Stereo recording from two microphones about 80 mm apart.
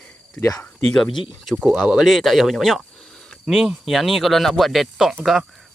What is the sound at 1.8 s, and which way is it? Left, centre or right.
Speech, centre.